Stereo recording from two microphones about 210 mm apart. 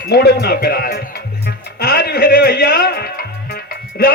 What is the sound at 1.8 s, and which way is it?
Music, 45° left (ahead or behind).